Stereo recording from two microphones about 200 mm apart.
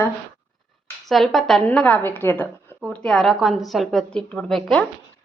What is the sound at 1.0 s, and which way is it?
A woman's voice, centre (ahead or behind).